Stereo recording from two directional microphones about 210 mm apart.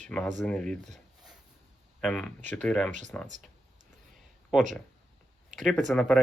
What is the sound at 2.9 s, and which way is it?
Speech, 35° right (ahead or behind).